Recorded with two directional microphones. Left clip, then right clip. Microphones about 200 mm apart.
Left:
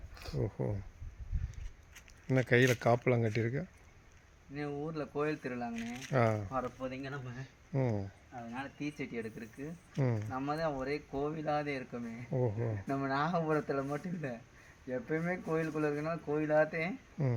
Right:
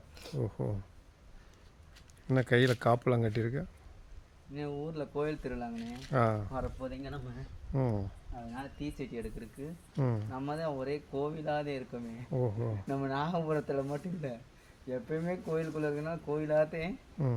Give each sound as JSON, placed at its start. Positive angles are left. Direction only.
{"t": 0.1, "sound": "a sound", "side_deg": -25}
{"t": 0.3, "sound": "speech", "side_deg": 0}
{"t": 2.3, "sound": "speech", "side_deg": -10}
{"t": 4.7, "sound": "speech", "side_deg": -5}
{"t": 12.4, "sound": "speech", "side_deg": 0}
{"t": 12.9, "sound": "speech", "side_deg": -15}
{"t": 17.2, "sound": "speech", "side_deg": -5}